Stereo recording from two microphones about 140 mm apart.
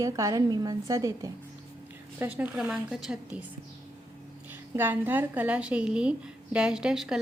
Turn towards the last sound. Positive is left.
turn(degrees=-5)  # may be behind; listen again after turning